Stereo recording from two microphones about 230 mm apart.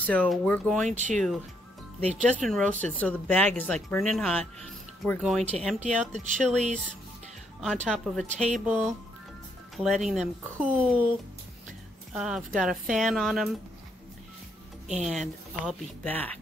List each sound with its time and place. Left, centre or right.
0.0 s speech: centre
0.8 s speech: right
1.1 s speech: centre
6.2 s speech: right
7.6 s speech: centre
8.3 s speech: right
8.5 s speech: centre
12.1 s speech: centre
14.9 s speech: centre